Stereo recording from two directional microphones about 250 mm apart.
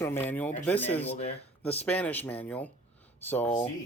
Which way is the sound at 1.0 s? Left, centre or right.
Left.